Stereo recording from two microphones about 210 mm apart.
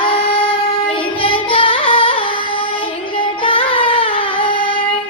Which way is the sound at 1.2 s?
25° left (ahead or behind).